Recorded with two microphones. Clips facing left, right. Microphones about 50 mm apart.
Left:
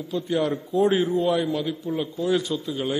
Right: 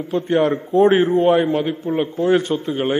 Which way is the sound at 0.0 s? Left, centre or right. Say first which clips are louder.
Right 7 dB; right.